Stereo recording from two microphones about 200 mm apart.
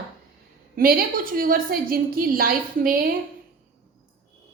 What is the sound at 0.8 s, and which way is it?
A woman's voice, 45° right (ahead or behind).